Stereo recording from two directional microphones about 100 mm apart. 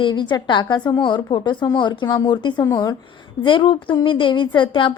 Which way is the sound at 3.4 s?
50° left (ahead or behind).